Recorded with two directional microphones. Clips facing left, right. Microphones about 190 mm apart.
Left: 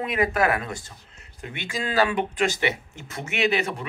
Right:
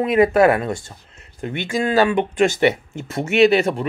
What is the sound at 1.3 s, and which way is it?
Speech, 45° right (ahead or behind).